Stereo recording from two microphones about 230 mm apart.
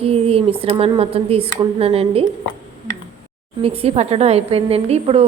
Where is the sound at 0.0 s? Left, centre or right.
Right.